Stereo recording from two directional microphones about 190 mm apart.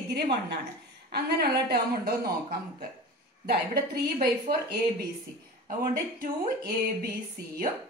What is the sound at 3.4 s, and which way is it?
A woman's voice, 55° right (ahead or behind).